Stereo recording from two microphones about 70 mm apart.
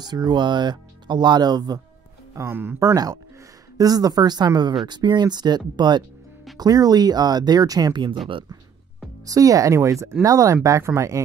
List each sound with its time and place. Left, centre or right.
0.0 s speech: right
2.3 s speech: right
3.7 s speech: right
6.6 s speech: right
9.2 s speech: right